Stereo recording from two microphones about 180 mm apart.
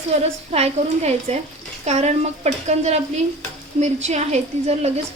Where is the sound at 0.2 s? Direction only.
35° right (ahead or behind).